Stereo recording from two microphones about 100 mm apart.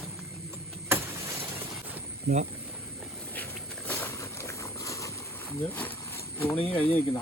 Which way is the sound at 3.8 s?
25° left (ahead or behind).